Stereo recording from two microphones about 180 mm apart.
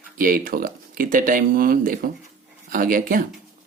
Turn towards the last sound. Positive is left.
turn(degrees=-50)  # may be behind; listen again after turning